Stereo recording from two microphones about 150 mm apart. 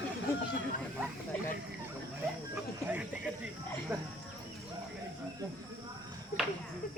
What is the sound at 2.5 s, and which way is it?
Music, 10° right (ahead or behind).